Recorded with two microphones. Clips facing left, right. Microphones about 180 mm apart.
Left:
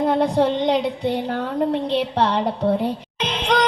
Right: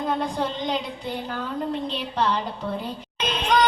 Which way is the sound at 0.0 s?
70° left (ahead or behind).